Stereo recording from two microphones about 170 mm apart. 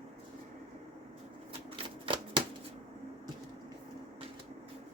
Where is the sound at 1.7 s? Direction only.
30° right (ahead or behind).